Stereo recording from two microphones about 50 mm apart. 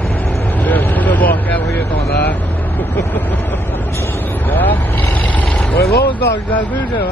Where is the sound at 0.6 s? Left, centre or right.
Left.